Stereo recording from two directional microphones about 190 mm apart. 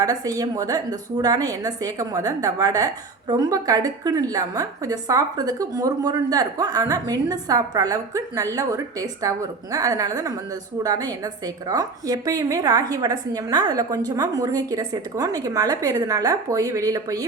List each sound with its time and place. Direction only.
0.0 s a woman's voice: 20° right (ahead or behind)